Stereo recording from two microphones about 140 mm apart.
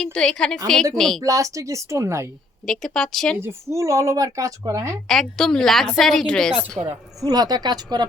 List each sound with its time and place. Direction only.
0.0 s a woman's voice: 5° left (ahead or behind)
1.2 s speech: 25° right (ahead or behind)
2.6 s a woman's voice: 5° left (ahead or behind)
3.4 s speech: 20° right (ahead or behind)
5.0 s a woman's voice: centre (ahead or behind)
6.7 s speech: 25° right (ahead or behind)